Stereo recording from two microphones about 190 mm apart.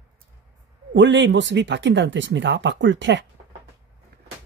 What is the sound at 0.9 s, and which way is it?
Speech, 70° right (ahead or behind).